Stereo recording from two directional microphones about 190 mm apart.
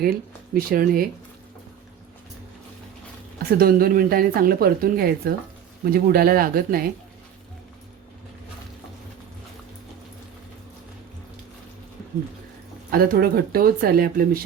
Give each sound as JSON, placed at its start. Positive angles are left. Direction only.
{"t": 0.0, "sound": "speech", "side_deg": -50}
{"t": 3.6, "sound": "speech", "side_deg": -50}
{"t": 12.9, "sound": "speech", "side_deg": -50}